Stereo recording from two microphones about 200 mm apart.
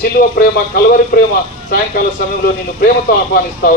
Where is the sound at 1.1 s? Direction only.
45° left (ahead or behind).